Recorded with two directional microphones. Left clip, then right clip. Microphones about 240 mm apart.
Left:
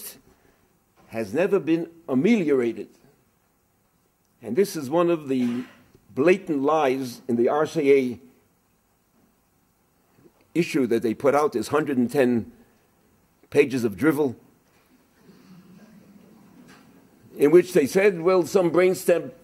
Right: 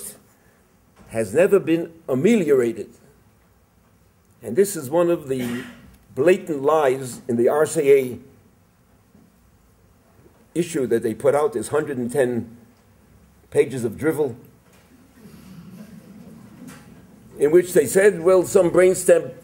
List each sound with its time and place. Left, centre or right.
1.1 s a man's voice: centre
4.4 s a man's voice: centre
10.5 s a man's voice: left
13.5 s a man's voice: left
17.4 s a man's voice: left; by 19.2 s centre